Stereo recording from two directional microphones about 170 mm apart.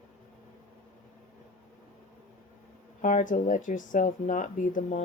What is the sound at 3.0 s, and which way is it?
Speech, 50° left (ahead or behind).